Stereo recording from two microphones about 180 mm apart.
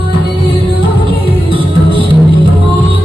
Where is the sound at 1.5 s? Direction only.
30° right (ahead or behind).